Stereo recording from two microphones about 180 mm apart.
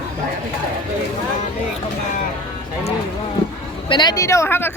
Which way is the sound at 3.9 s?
25° left (ahead or behind).